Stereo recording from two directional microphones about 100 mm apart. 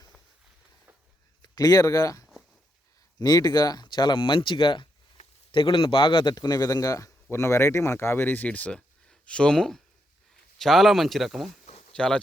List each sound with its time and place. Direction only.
1.4 s a man's voice: 35° left (ahead or behind); by 12.2 s 10° left (ahead or behind)